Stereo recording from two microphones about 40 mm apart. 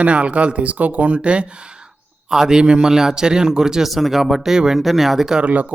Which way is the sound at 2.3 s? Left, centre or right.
Centre.